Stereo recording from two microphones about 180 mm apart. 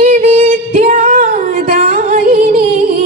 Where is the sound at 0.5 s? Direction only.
50° right (ahead or behind).